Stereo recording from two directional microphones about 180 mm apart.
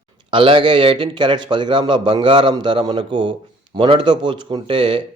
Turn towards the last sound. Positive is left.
turn(degrees=-25)  # may be behind; listen again after turning